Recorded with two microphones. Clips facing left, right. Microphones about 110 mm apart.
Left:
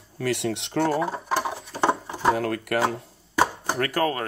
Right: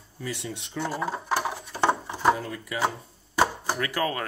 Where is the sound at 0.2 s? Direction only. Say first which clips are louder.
Left 9 dB; 75° left (ahead or behind).